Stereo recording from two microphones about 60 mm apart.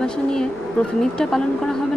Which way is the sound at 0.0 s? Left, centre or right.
Centre.